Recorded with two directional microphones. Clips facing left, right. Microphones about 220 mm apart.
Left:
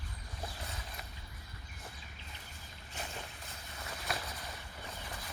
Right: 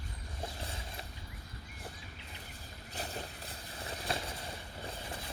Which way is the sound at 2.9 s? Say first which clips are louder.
Right 3 dB; 35° right (ahead or behind).